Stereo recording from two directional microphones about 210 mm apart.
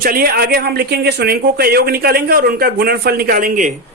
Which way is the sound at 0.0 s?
45° right (ahead or behind).